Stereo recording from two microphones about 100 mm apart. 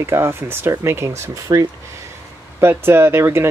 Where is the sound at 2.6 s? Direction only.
25° right (ahead or behind).